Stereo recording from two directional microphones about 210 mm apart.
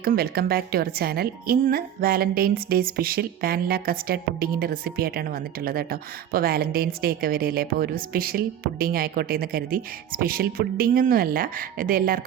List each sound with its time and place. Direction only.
0.0 s a woman's voice: 45° right (ahead or behind)